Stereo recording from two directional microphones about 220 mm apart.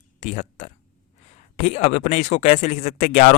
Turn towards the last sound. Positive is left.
turn(degrees=35)  # may be behind; listen again after turning